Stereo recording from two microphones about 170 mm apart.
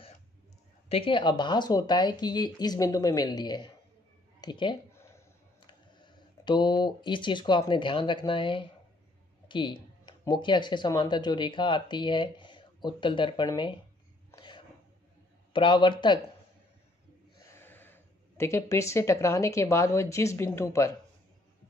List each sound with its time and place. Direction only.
0.8 s speech: 35° left (ahead or behind)
5.9 s speech: 25° left (ahead or behind)
14.3 s a sound: 25° left (ahead or behind)
15.5 s speech: 30° left (ahead or behind)
17.5 s speech: 15° left (ahead or behind)